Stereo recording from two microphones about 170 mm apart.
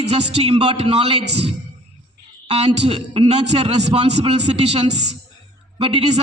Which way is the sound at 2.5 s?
35° right (ahead or behind).